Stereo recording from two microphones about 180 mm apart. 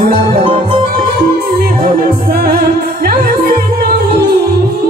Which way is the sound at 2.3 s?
55° right (ahead or behind).